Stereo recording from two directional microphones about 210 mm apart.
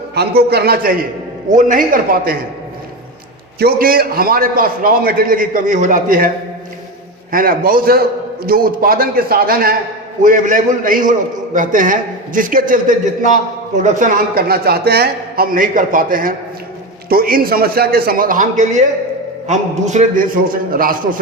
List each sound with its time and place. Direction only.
0.1 s a man's voice: 50° right (ahead or behind)
3.6 s a man's voice: 45° right (ahead or behind)